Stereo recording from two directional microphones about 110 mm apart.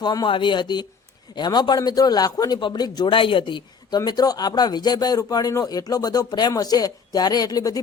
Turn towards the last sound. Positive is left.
turn(degrees=35)  # may be behind; listen again after turning